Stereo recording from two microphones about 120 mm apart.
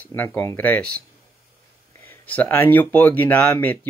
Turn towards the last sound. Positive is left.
turn(degrees=15)  # may be behind; listen again after turning